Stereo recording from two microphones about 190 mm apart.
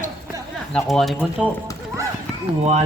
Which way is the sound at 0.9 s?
Centre (ahead or behind).